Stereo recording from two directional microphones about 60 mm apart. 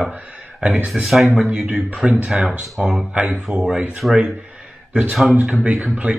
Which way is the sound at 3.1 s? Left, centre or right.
Right.